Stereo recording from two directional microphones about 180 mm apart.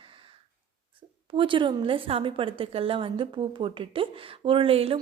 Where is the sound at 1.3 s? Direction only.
30° right (ahead or behind).